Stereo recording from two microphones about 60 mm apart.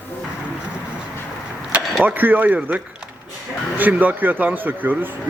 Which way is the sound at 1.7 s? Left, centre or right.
Centre.